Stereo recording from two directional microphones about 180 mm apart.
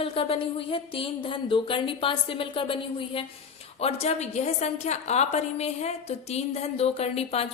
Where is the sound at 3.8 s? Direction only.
35° left (ahead or behind).